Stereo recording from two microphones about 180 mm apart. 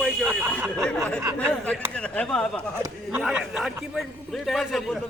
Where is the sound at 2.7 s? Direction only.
15° right (ahead or behind).